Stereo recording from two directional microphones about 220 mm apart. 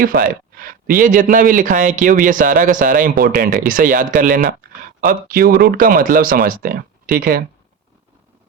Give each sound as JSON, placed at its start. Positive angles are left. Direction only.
{"t": 0.0, "sound": "speech", "side_deg": -40}